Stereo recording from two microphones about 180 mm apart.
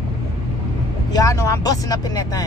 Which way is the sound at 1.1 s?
20° left (ahead or behind).